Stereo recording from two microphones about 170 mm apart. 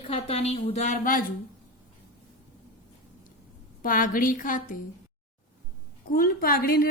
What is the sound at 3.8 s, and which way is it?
Speech, 55° left (ahead or behind).